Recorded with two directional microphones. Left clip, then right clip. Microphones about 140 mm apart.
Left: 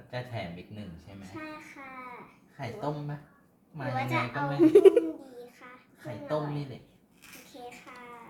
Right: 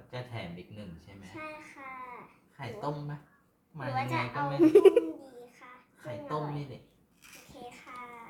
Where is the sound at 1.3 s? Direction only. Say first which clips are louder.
Even; centre (ahead or behind).